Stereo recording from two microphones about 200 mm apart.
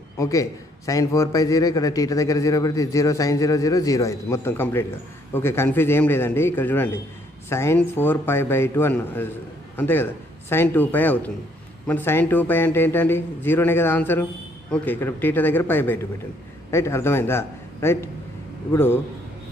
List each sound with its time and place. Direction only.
0.2 s a man's voice: 15° left (ahead or behind)